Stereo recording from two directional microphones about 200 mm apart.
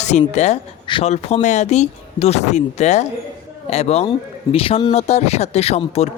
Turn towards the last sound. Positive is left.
turn(degrees=30)  # may be behind; listen again after turning